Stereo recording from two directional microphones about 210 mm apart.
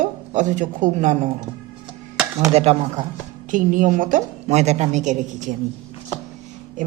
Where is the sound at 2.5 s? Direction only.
30° right (ahead or behind).